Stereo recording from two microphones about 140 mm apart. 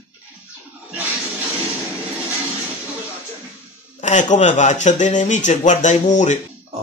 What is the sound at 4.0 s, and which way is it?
Speech, 60° left (ahead or behind).